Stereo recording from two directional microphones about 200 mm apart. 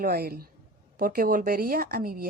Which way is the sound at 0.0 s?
50° right (ahead or behind).